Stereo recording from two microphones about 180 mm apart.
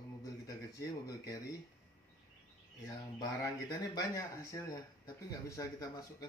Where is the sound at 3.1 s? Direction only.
20° left (ahead or behind).